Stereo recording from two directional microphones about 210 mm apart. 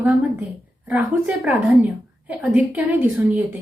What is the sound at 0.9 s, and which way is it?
A woman's voice, 5° right (ahead or behind).